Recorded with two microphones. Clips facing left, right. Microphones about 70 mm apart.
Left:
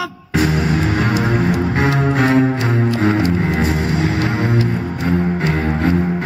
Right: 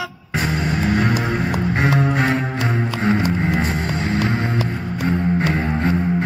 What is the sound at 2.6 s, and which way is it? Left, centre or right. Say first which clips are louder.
Music: left 4 dB; centre.